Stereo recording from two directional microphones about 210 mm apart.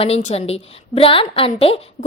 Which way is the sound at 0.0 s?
30° left (ahead or behind).